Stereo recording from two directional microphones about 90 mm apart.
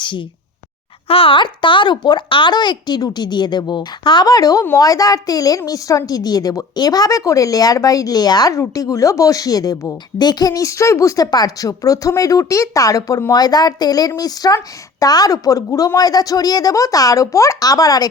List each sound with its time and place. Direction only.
1.0 s a woman's voice: 90° left; by 18.1 s 45° left (ahead or behind)